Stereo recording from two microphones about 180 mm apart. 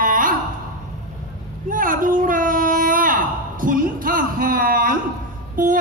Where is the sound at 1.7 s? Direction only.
50° right (ahead or behind).